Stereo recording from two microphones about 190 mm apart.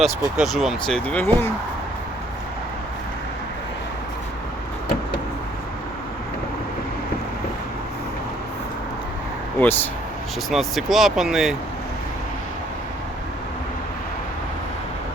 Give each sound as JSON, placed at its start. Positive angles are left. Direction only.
{"t": 0.0, "sound": "speech", "side_deg": 0}
{"t": 9.6, "sound": "a sound", "side_deg": 10}
{"t": 10.5, "sound": "speech", "side_deg": 0}